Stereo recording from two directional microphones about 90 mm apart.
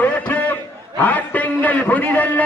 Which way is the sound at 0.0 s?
15° left (ahead or behind).